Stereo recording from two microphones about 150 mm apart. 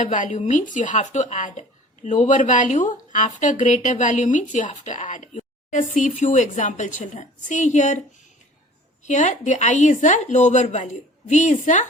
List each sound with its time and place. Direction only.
0.0 s speech: 55° left (ahead or behind)
9.0 s a woman's voice: 55° left (ahead or behind)